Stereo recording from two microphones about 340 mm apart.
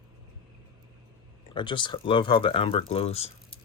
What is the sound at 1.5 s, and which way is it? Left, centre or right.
Speech, centre.